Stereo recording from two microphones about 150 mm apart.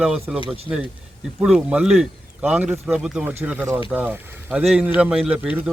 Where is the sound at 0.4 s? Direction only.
40° right (ahead or behind).